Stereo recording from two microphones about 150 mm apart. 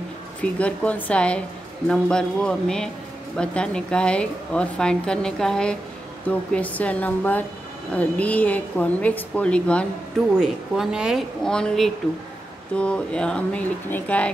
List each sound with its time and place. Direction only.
0.4 s a woman's voice: 10° left (ahead or behind)
10.3 s a woman's voice: 5° right (ahead or behind)